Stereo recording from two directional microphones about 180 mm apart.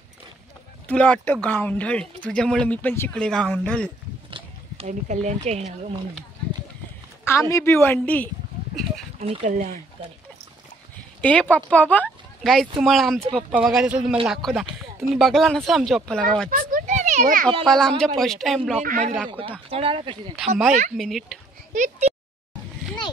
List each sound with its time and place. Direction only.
0.8 s speech: 5° left (ahead or behind)
4.3 s oink: 40° right (ahead or behind)
7.2 s speech: 15° left (ahead or behind)
9.4 s speech: 45° right (ahead or behind)
11.1 s speech: 5° left (ahead or behind)
16.4 s children playing: 50° right (ahead or behind)
17.6 s speech: 5° left (ahead or behind)
18.8 s speech: 45° right (ahead or behind)
19.7 s speech: 30° right (ahead or behind)
20.3 s speech: centre (ahead or behind)
21.7 s speech: 40° right (ahead or behind)